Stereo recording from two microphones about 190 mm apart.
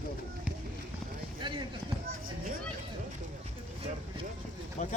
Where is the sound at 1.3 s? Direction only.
25° right (ahead or behind).